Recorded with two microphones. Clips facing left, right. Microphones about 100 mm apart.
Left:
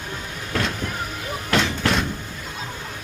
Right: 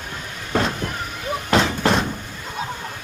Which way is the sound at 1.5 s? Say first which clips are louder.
Right 3 dB; 35° right (ahead or behind).